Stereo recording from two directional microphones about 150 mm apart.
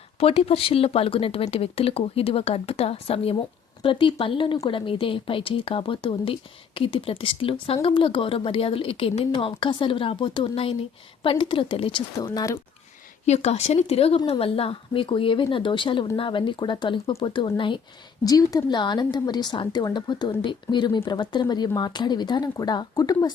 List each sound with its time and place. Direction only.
0.2 s speech: 40° left (ahead or behind); by 12.5 s 25° left (ahead or behind)
13.2 s a woman's voice: 45° left (ahead or behind); by 23.3 s 25° left (ahead or behind)